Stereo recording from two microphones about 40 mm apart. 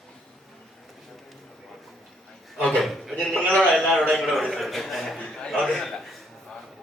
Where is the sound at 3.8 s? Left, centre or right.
Centre.